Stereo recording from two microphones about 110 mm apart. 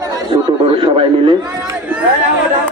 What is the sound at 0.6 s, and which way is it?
Speech, 55° right (ahead or behind).